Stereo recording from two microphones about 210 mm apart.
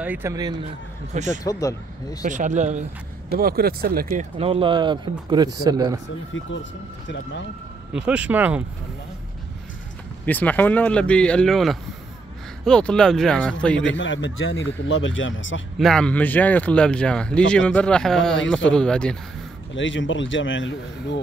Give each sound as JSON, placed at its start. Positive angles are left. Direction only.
{"t": 0.0, "sound": "speech", "side_deg": -10}
{"t": 1.1, "sound": "speech", "side_deg": -35}
{"t": 1.4, "sound": "speech", "side_deg": 15}
{"t": 2.2, "sound": "speech", "side_deg": -35}
{"t": 3.3, "sound": "speech", "side_deg": -45}
{"t": 4.4, "sound": "a man's voice", "side_deg": -25}
{"t": 6.3, "sound": "speech", "side_deg": 65}
{"t": 7.9, "sound": "speech", "side_deg": -5}
{"t": 10.2, "sound": "speech", "side_deg": 10}
{"t": 13.7, "sound": "speech", "side_deg": 65}
{"t": 15.8, "sound": "speech", "side_deg": 5}
{"t": 19.7, "sound": "speech", "side_deg": 65}